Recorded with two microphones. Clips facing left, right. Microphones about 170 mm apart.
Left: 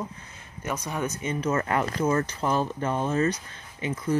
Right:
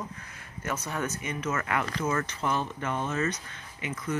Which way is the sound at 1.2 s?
30° left (ahead or behind).